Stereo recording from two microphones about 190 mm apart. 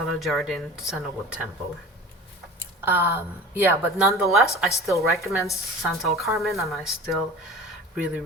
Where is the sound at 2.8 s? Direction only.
10° right (ahead or behind).